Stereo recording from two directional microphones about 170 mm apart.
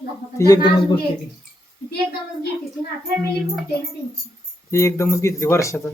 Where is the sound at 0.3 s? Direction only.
20° left (ahead or behind).